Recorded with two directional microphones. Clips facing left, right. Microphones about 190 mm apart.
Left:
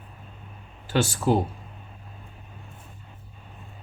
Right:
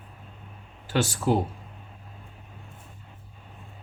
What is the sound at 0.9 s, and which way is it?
Speech, 30° left (ahead or behind).